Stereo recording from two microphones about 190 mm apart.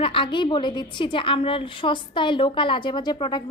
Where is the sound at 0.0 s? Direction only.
25° left (ahead or behind).